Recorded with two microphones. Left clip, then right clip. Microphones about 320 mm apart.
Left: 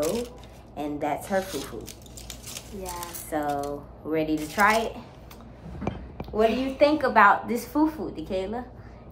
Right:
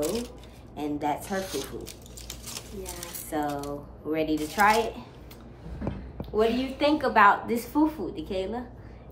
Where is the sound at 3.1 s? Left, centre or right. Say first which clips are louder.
Left 2 dB; centre.